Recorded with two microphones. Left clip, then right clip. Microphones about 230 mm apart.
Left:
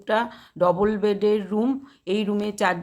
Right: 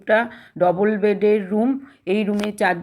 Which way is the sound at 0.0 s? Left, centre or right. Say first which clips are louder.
Right 5 dB; centre.